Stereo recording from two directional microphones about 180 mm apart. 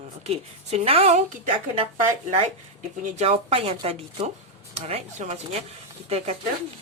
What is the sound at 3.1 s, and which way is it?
A woman's voice, 35° right (ahead or behind).